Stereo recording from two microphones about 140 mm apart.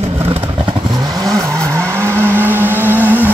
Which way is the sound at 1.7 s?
20° right (ahead or behind).